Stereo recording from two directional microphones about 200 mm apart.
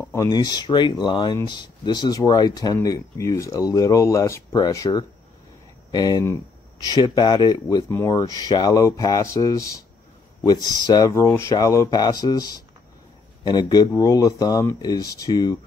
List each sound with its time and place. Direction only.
0.1 s speech: 20° left (ahead or behind)
10.9 s speech: 15° left (ahead or behind)